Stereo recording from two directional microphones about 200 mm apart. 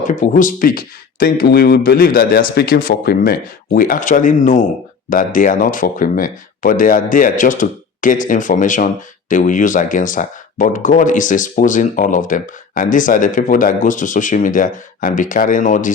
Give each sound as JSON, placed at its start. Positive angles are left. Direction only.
{"t": 0.1, "sound": "speech", "side_deg": 40}